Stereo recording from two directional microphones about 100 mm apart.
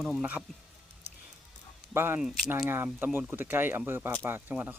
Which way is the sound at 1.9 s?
25° right (ahead or behind).